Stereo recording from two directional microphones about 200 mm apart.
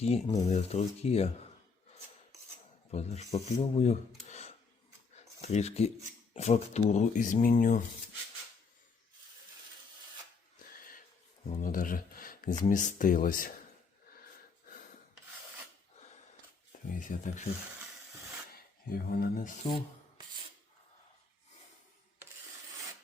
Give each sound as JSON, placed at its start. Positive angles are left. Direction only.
{"t": 0.0, "sound": "speech", "side_deg": 30}
{"t": 2.9, "sound": "speech", "side_deg": 35}
{"t": 4.3, "sound": "a sound", "side_deg": 35}
{"t": 5.4, "sound": "speech", "side_deg": 35}
{"t": 11.4, "sound": "speech", "side_deg": 40}
{"t": 16.9, "sound": "speech", "side_deg": 40}
{"t": 19.1, "sound": "speech", "side_deg": 45}